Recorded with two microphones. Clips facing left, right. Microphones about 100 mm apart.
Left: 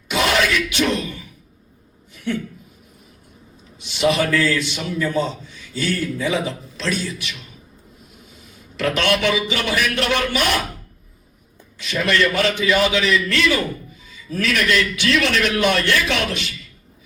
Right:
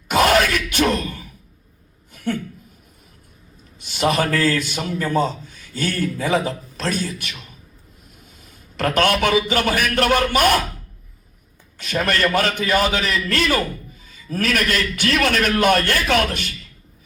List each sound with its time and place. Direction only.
0.1 s a sound: 45° right (ahead or behind)
3.8 s a man's voice: 45° right (ahead or behind)
8.4 s a man's voice: 45° right (ahead or behind)
11.8 s a man's voice: 45° right (ahead or behind)